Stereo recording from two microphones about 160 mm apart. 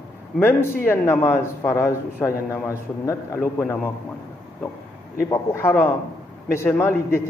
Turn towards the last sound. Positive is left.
turn(degrees=15)  # may be behind; listen again after turning